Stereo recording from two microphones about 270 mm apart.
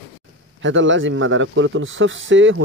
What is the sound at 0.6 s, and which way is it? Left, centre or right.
Speech, right.